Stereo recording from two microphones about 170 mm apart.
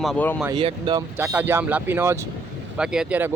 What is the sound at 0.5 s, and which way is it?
Speech, 30° right (ahead or behind).